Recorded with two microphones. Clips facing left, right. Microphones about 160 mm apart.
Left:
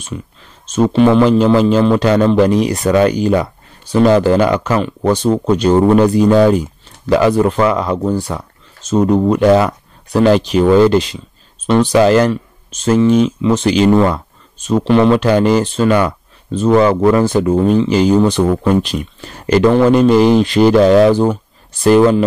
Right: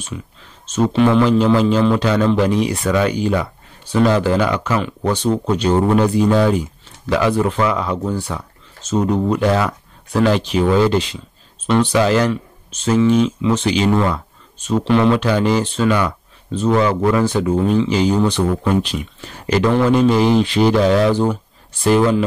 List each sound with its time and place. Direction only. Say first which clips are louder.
0.9 s a man's voice: left 4 dB; 35° left (ahead or behind)